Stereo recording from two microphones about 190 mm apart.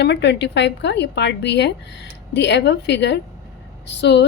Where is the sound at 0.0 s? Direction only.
65° left (ahead or behind).